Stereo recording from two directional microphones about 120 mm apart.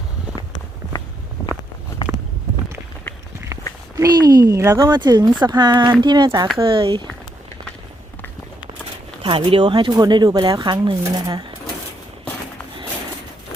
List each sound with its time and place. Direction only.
1.4 s walk: 25° left (ahead or behind)
3.9 s speech: 30° right (ahead or behind)
4.9 s speech: 35° right (ahead or behind)
9.2 s speech: 45° right (ahead or behind)